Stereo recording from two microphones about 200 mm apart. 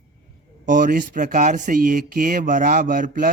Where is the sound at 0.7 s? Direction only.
40° right (ahead or behind).